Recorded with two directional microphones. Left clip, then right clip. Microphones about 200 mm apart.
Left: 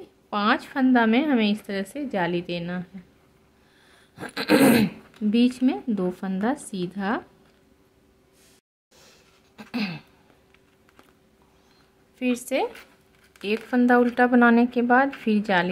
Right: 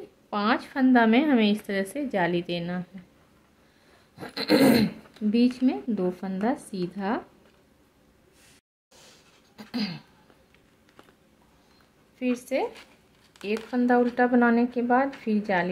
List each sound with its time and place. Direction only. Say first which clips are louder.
0.3 s a woman's voice: left 3 dB; 10° left (ahead or behind)
4.2 s speech: left 2 dB; 15° left (ahead or behind)
9.6 s throat clearing: left 2 dB; 15° left (ahead or behind)
12.2 s speech: left 2 dB; 20° left (ahead or behind)
13.7 s speech: left 3 dB; 20° left (ahead or behind)